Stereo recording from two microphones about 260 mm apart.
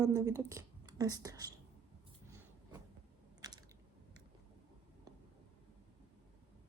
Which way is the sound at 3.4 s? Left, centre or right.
Centre.